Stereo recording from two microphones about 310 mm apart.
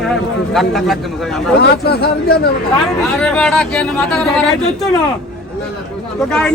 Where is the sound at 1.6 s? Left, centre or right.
Left.